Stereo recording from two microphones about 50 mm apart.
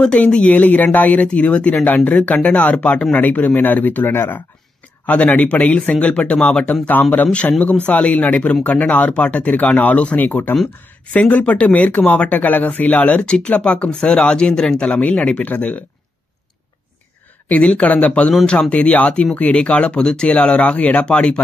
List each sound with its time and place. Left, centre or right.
0.2 s speech: left
5.0 s speech: left
6.9 s speech: left
13.2 s speech: centre
14.8 s speech: left
17.5 s speech: left
18.4 s speech: centre
18.7 s speech: left